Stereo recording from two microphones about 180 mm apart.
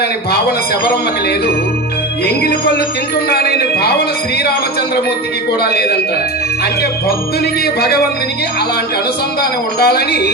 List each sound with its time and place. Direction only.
2.2 s speech: 60° left (ahead or behind)
7.8 s speech: 60° left (ahead or behind)
9.4 s speech: 60° left (ahead or behind)